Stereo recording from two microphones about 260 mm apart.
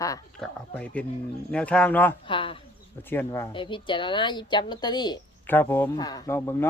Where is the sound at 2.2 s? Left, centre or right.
Centre.